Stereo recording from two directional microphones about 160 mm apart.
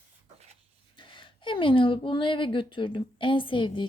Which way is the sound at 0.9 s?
30° left (ahead or behind).